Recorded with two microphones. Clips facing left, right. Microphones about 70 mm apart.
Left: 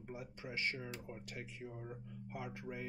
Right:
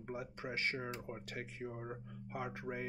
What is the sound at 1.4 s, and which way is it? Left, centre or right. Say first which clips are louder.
Speech: right 5 dB; right.